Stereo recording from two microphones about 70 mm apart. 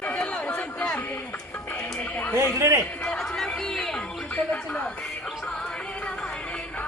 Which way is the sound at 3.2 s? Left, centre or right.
Centre.